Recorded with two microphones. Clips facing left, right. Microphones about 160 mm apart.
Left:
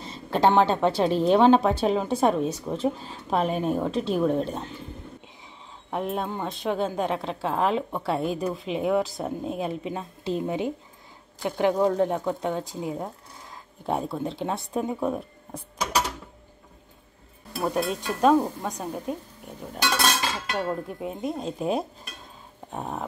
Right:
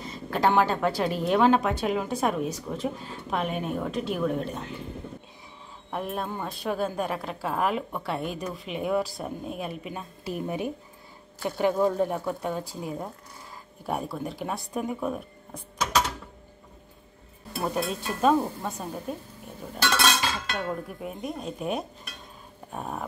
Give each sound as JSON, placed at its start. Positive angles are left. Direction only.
{"t": 0.0, "sound": "a woman's voice", "side_deg": 30}
{"t": 5.9, "sound": "a woman's voice", "side_deg": 20}
{"t": 17.6, "sound": "speech", "side_deg": 0}
{"t": 19.7, "sound": "speech", "side_deg": 15}
{"t": 21.0, "sound": "a woman's voice", "side_deg": 25}